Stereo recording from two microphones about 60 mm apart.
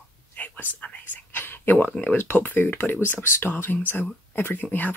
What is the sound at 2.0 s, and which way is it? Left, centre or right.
Speech, left.